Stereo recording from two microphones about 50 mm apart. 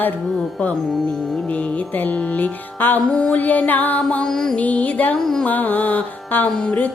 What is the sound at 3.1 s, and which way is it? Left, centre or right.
Music, left.